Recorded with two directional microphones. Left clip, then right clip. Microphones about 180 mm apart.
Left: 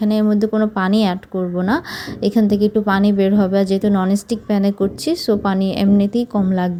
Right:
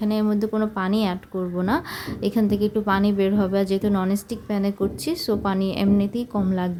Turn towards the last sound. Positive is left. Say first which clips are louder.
# left 6 dB
turn(degrees=25)  # may be behind; listen again after turning